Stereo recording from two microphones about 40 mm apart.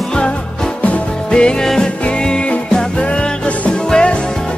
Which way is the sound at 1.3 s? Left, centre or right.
Left.